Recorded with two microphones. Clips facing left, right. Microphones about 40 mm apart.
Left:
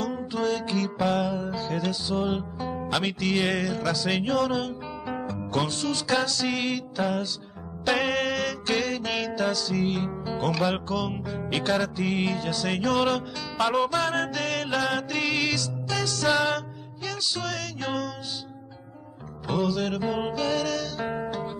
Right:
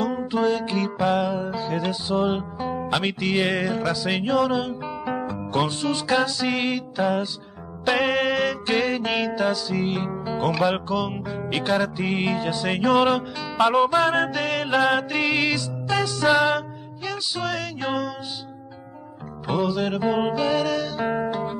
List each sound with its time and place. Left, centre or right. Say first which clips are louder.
0.0 s music: right 5 dB; right
19.4 s music: right 3 dB; centre